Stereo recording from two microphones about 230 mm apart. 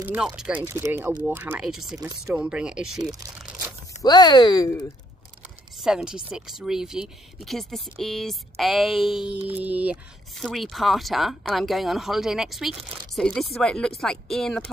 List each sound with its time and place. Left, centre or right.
0.0 s speech: centre
2.0 s speech: centre
3.1 s speech: centre
4.0 s speech: centre
5.8 s speech: centre